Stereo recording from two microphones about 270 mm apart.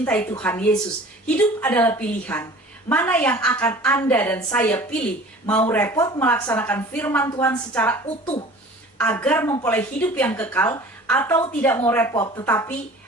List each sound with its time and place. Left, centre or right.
0.0 s a woman's voice: centre
8.2 s speech: centre
9.0 s a woman's voice: centre